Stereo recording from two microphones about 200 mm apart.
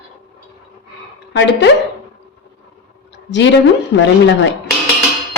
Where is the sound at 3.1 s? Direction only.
65° left (ahead or behind).